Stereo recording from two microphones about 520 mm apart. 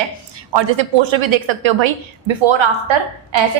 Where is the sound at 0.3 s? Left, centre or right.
Right.